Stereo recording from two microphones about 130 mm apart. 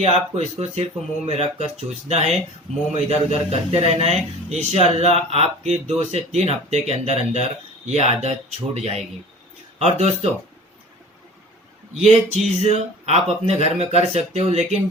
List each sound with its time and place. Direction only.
0.0 s a man's voice: 55° right (ahead or behind)
12.0 s a sound: 55° right (ahead or behind)
12.7 s a man's voice: 55° right (ahead or behind)